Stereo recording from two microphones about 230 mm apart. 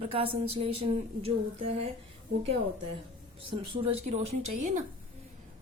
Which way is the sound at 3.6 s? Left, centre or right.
Right.